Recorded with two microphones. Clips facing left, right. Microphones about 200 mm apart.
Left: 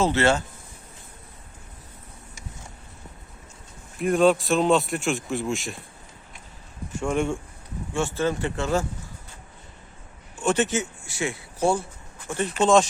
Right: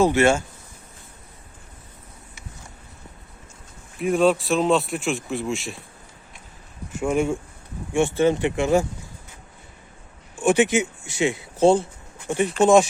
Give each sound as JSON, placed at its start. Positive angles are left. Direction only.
{"t": 0.0, "sound": "speech", "side_deg": -15}
{"t": 3.9, "sound": "speech", "side_deg": 0}
{"t": 7.0, "sound": "speech", "side_deg": -5}
{"t": 7.9, "sound": "speech", "side_deg": -20}
{"t": 10.4, "sound": "speech", "side_deg": -10}